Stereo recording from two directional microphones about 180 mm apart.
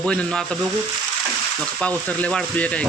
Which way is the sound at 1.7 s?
5° left (ahead or behind).